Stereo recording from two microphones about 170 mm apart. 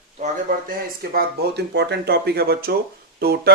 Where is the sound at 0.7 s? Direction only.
65° right (ahead or behind).